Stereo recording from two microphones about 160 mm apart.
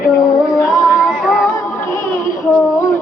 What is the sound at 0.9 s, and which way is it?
Music, centre (ahead or behind).